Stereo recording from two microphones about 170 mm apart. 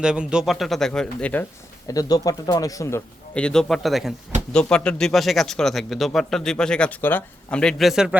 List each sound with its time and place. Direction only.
0.0 s a man's voice: 5° right (ahead or behind)
1.9 s a man's voice: 20° left (ahead or behind); by 8.1 s centre (ahead or behind)